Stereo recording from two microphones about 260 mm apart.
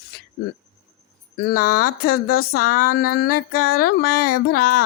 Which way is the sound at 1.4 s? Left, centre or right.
Left.